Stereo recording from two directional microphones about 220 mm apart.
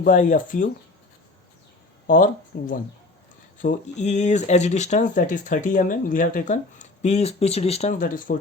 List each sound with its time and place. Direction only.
0.0 s speech: 35° left (ahead or behind)
2.0 s speech: 35° left (ahead or behind)